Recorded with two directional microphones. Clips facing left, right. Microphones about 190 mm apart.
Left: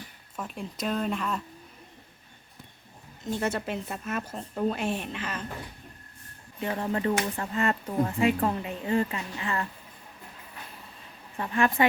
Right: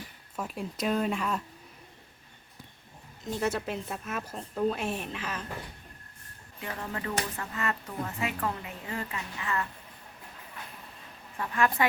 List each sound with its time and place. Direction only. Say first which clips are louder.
0.3 s a woman's voice: right 1 dB; 5° right (ahead or behind)
3.2 s a woman's voice: left 1 dB; centre (ahead or behind)
6.6 s speech: left 8 dB; 30° left (ahead or behind)
11.3 s speech: left 3 dB; 25° left (ahead or behind)